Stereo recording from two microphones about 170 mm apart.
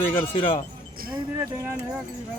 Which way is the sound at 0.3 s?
30° left (ahead or behind).